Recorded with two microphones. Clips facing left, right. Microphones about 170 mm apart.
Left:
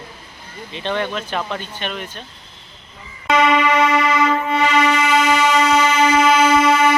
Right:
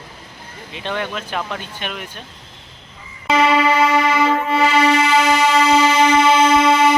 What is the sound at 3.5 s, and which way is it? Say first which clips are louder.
Music: right 1 dB; 30° right (ahead or behind).